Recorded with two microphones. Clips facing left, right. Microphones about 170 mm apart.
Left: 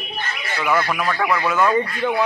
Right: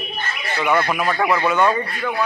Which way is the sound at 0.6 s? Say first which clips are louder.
Right 2 dB; 20° right (ahead or behind).